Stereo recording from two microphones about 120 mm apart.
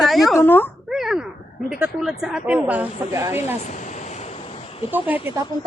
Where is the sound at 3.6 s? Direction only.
90° left; by 4.6 s 55° left (ahead or behind).